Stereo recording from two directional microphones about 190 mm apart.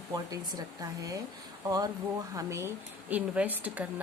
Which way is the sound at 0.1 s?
20° right (ahead or behind).